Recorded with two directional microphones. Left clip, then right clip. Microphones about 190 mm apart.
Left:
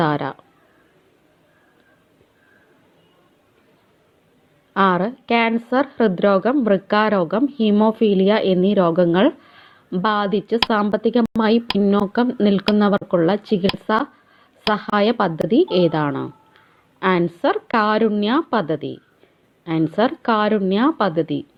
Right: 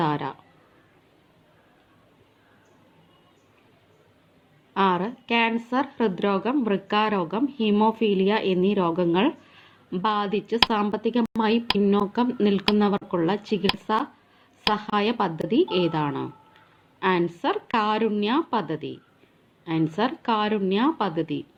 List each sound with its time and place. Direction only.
0.0 s speech: 25° left (ahead or behind)
4.7 s speech: 25° left (ahead or behind)
11.2 s a woman's voice: centre (ahead or behind)
12.1 s speech: 25° left (ahead or behind)